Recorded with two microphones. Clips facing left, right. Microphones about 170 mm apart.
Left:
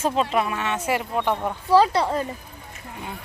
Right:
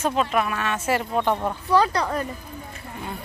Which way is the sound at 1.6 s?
30° left (ahead or behind).